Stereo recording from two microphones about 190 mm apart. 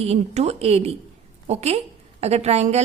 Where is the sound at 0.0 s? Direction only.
35° right (ahead or behind).